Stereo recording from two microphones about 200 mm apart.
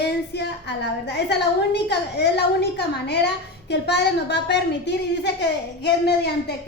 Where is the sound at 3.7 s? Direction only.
55° left (ahead or behind).